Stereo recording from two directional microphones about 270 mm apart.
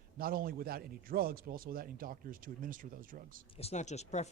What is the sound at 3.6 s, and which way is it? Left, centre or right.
Speech, left.